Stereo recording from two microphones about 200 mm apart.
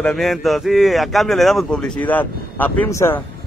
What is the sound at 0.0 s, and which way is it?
A man's voice, centre (ahead or behind).